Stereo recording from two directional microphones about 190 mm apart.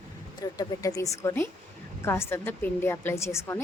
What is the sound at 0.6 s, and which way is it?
A woman's voice, 20° left (ahead or behind).